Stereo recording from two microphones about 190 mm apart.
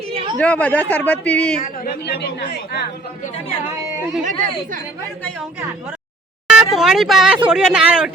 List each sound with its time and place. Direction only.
0.1 s a sound: 30° right (ahead or behind)
0.3 s speech: 5° left (ahead or behind)
2.1 s speech: 65° left (ahead or behind)
4.2 s speech: 40° right (ahead or behind)
6.5 s speech: centre (ahead or behind)